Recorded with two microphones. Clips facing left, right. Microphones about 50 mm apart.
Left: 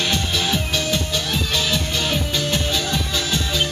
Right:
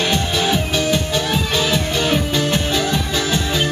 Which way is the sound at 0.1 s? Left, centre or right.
Centre.